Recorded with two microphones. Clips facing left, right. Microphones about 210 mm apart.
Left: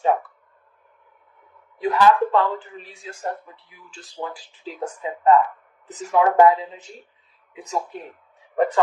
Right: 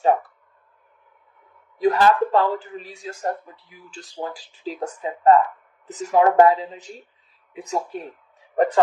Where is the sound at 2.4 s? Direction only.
40° right (ahead or behind).